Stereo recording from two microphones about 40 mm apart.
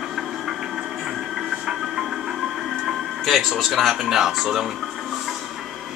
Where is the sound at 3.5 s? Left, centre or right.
Centre.